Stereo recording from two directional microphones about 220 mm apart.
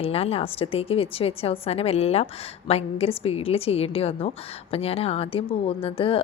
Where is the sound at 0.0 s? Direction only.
25° left (ahead or behind).